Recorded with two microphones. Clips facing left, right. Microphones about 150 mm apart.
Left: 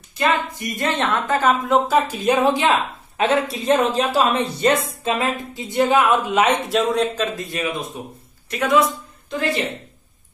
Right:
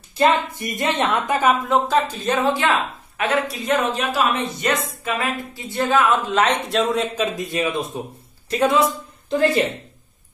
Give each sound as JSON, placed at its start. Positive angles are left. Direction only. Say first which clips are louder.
{"t": 0.2, "sound": "a woman's voice", "louder": "right 3 dB", "side_deg": -25}
{"t": 1.7, "sound": "a woman's voice", "louder": "left 1 dB", "side_deg": 5}
{"t": 3.2, "sound": "a woman's voice", "louder": "left 3 dB", "side_deg": 25}
{"t": 7.2, "sound": "a woman's voice", "louder": "right 2 dB", "side_deg": -15}